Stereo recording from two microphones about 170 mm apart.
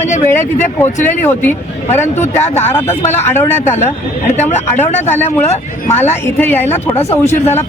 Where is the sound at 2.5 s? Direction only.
15° left (ahead or behind).